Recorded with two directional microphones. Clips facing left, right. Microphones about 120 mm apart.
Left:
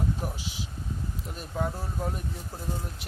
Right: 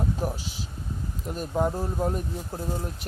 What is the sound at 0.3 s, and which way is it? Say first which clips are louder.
Speech: right 1 dB; 45° right (ahead or behind).